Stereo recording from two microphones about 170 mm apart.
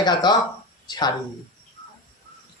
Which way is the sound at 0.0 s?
25° left (ahead or behind).